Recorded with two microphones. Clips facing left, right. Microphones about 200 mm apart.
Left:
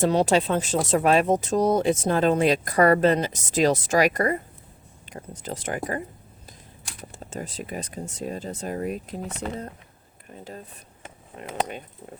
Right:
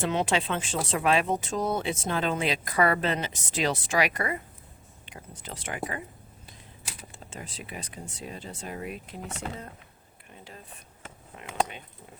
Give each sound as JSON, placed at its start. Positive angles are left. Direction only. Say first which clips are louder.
{"t": 0.0, "sound": "speech", "louder": "left 7 dB", "side_deg": 40}
{"t": 7.1, "sound": "speech", "louder": "left 10 dB", "side_deg": 40}
{"t": 11.3, "sound": "speech", "louder": "left 1 dB", "side_deg": 40}